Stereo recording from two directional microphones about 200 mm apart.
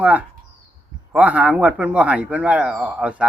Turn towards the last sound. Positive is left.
turn(degrees=-5)  # may be behind; listen again after turning